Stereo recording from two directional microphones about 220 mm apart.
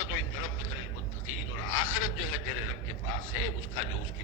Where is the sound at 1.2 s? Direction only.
65° left (ahead or behind).